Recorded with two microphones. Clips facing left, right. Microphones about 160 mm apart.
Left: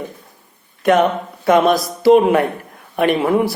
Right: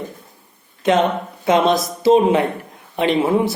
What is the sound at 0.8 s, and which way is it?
Speech, 20° right (ahead or behind).